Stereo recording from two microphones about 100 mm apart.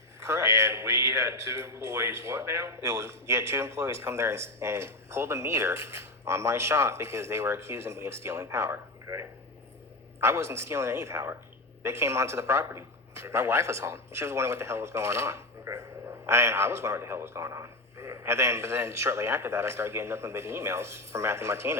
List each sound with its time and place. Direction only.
0.2 s a man's voice: 30° right (ahead or behind)